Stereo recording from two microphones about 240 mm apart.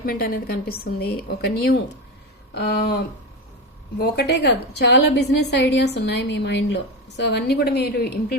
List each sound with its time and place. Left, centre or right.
0.0 s a woman's voice: left